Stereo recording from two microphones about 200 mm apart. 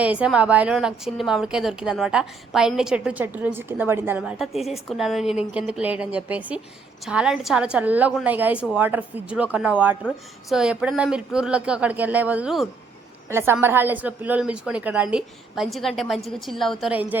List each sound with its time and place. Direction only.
0.0 s a woman's voice: 5° right (ahead or behind)